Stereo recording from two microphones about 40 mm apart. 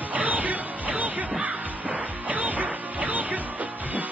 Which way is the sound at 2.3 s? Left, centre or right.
Right.